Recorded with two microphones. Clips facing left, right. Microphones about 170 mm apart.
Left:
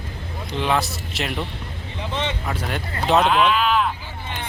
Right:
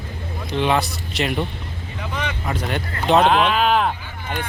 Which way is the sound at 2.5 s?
Centre (ahead or behind).